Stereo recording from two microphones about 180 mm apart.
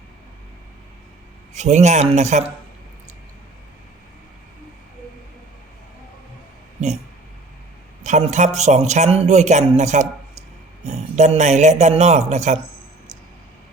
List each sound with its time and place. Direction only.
1.5 s speech: 40° right (ahead or behind)
8.0 s speech: 40° right (ahead or behind)